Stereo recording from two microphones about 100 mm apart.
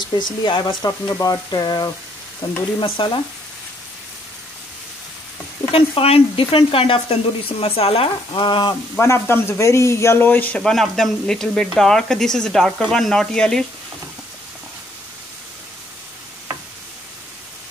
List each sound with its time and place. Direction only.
0.0 s speech: 50° left (ahead or behind)
1.2 s frying: 40° left (ahead or behind)
2.4 s speech: 40° left (ahead or behind)
2.8 s speech: 55° left (ahead or behind)
5.7 s speech: 65° left (ahead or behind); by 8.7 s 50° left (ahead or behind)
8.9 s speech: 25° left (ahead or behind)
10.6 s speech: 5° left (ahead or behind)